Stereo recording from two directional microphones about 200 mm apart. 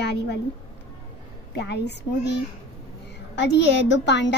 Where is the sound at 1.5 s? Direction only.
55° left (ahead or behind).